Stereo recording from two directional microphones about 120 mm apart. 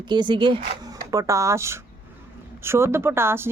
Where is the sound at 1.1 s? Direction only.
25° right (ahead or behind).